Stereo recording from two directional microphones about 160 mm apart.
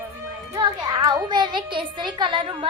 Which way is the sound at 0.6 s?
25° right (ahead or behind).